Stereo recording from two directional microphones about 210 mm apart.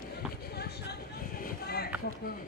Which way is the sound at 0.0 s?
50° left (ahead or behind).